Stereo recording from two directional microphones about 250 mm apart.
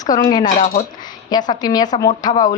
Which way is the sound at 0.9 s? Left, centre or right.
Centre.